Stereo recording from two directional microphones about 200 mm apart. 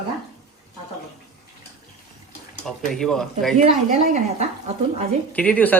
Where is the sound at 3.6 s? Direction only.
35° right (ahead or behind).